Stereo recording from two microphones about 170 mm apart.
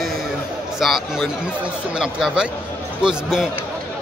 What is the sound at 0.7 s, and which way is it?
A man's voice, centre (ahead or behind).